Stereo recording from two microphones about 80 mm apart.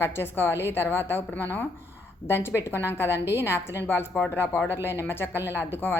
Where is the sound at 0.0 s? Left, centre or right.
Left.